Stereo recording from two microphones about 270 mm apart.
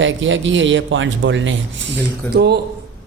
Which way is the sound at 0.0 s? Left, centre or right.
Right.